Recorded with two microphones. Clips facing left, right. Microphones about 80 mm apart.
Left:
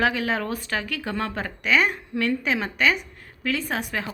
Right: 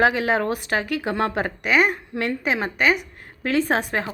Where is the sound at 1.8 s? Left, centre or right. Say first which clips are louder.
Right 1 dB; right.